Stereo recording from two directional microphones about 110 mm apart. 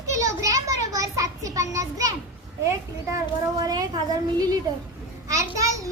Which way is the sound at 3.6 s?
35° right (ahead or behind).